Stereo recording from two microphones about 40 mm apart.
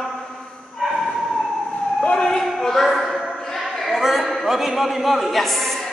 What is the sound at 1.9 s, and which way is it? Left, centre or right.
Emergency vehicle, left.